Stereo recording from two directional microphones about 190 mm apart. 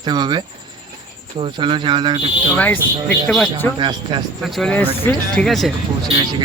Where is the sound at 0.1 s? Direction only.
20° right (ahead or behind).